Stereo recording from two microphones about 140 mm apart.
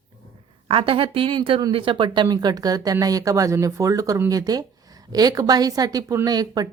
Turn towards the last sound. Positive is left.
turn(degrees=-30)  # may be behind; listen again after turning